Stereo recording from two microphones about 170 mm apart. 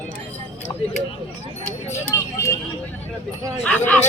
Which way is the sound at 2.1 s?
20° left (ahead or behind).